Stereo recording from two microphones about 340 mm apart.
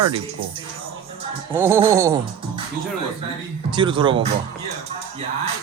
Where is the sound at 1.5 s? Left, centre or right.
Centre.